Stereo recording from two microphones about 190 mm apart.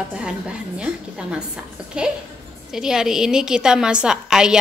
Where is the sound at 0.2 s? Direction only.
5° right (ahead or behind).